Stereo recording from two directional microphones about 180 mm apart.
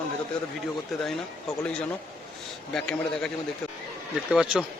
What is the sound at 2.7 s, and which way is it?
Speech, 5° left (ahead or behind).